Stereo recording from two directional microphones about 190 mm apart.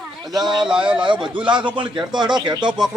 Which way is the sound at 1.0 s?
25° right (ahead or behind).